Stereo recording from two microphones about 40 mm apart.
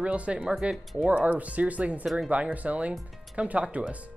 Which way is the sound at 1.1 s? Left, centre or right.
Right.